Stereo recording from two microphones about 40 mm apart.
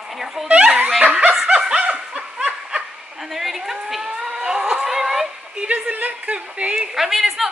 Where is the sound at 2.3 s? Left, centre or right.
Right.